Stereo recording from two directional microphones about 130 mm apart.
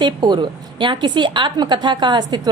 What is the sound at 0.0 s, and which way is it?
A woman's voice, 35° right (ahead or behind).